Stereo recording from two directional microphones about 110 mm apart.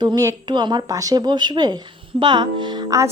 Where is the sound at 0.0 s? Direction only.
40° right (ahead or behind).